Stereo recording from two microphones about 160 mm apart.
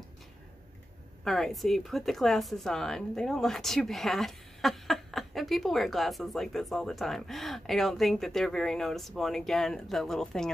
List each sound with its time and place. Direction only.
1.2 s speech: centre (ahead or behind)